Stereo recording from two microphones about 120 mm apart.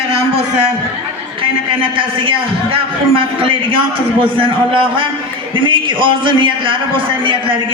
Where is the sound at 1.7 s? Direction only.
50° right (ahead or behind).